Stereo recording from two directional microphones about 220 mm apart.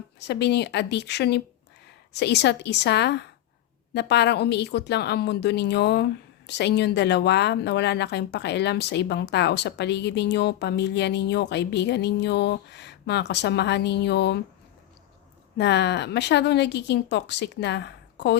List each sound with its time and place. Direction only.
0.2 s speech: 50° left (ahead or behind)
15.5 s speech: 50° left (ahead or behind)